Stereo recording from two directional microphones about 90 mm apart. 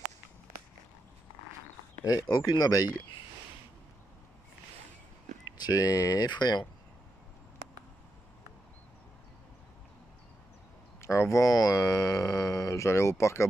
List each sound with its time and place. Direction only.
2.0 s speech: 50° left (ahead or behind)
5.6 s speech: 45° left (ahead or behind)
11.0 s speech: 30° left (ahead or behind)